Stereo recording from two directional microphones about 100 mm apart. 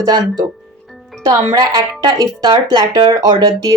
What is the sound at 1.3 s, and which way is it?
Speech, 45° right (ahead or behind).